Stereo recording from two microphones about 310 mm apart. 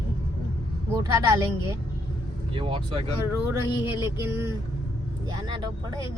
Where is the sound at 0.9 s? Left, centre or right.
Centre.